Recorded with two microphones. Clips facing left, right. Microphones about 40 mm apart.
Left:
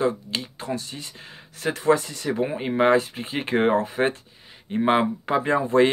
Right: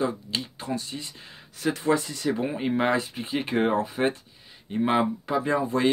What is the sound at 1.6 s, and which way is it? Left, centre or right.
Speech, left.